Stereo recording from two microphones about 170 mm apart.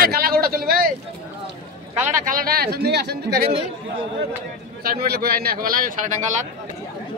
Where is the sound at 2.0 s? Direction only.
55° right (ahead or behind); by 3.5 s 70° right (ahead or behind).